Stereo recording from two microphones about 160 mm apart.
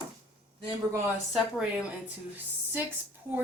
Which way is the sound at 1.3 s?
5° right (ahead or behind).